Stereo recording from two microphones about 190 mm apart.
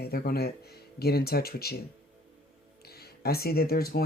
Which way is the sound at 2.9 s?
55° left (ahead or behind).